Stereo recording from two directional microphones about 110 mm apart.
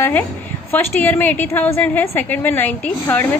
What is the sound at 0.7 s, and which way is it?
A woman's voice, 20° left (ahead or behind).